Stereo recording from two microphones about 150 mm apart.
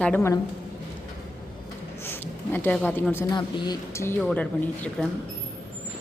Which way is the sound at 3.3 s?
30° left (ahead or behind).